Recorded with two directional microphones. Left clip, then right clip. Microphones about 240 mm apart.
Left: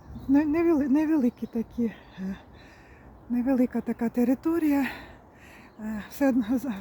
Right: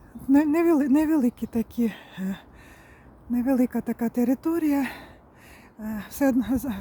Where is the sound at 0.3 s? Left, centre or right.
Centre.